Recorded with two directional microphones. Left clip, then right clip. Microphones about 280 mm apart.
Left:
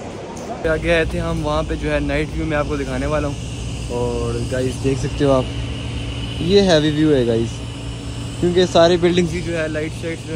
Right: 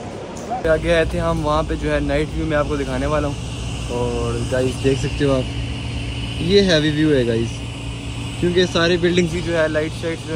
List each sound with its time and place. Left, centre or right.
0.7 s speech: centre
6.4 s speech: centre